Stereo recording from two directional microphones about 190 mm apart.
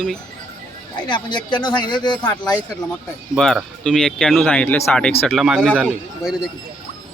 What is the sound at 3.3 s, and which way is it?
Speech, centre (ahead or behind).